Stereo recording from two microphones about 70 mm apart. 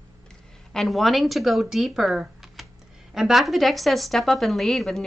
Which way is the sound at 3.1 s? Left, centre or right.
Centre.